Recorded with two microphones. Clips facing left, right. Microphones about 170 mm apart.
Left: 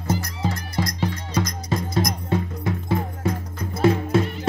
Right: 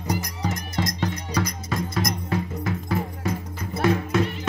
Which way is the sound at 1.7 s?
30° left (ahead or behind).